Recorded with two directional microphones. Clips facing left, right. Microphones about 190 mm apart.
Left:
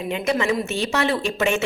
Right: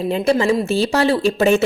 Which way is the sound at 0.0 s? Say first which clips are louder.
Right 6 dB; 35° right (ahead or behind).